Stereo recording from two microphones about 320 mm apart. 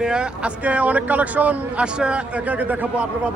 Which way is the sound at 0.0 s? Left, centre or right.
Centre.